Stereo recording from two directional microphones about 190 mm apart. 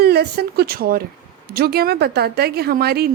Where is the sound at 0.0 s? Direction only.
60° right (ahead or behind).